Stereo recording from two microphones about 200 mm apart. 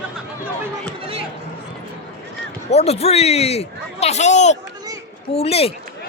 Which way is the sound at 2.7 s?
30° left (ahead or behind).